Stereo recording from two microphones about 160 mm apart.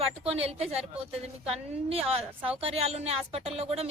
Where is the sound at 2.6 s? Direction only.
40° right (ahead or behind).